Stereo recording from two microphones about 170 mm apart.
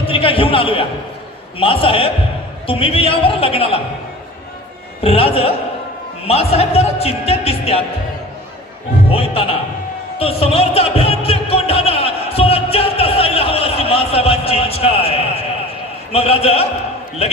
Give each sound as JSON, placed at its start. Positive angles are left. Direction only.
{"t": 0.0, "sound": "speech", "side_deg": 30}
{"t": 5.0, "sound": "speech", "side_deg": 35}
{"t": 9.1, "sound": "speech", "side_deg": 35}
{"t": 10.1, "sound": "music", "side_deg": 35}
{"t": 16.1, "sound": "speech", "side_deg": 35}